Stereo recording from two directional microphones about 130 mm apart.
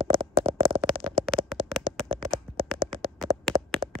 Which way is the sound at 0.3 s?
50° right (ahead or behind).